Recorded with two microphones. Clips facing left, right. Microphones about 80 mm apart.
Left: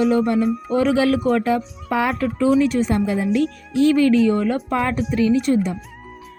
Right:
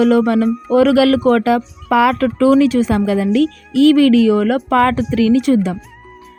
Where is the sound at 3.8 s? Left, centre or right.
Right.